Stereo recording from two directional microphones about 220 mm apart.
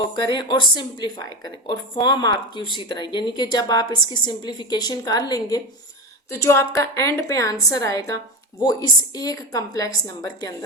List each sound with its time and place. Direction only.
0.2 s a woman's voice: 20° left (ahead or behind)